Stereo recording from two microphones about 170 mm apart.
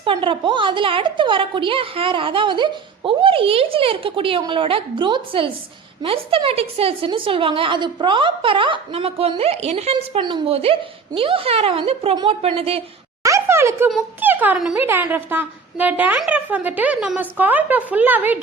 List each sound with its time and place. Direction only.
0.0 s a woman's voice: 30° right (ahead or behind)
13.2 s a sound: 15° right (ahead or behind)
14.2 s speech: 10° right (ahead or behind)